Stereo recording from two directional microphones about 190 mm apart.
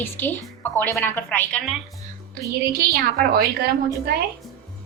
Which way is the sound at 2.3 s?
55° right (ahead or behind).